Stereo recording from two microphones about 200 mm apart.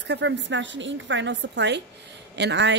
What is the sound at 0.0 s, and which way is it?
A woman's voice, 60° right (ahead or behind).